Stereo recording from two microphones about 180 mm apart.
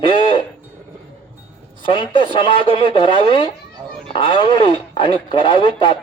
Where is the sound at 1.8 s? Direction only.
25° left (ahead or behind).